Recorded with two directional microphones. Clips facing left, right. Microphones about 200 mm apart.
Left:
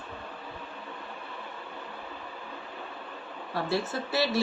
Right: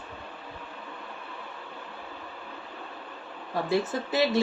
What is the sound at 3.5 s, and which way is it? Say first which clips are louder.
Speech: right 3 dB; 15° right (ahead or behind).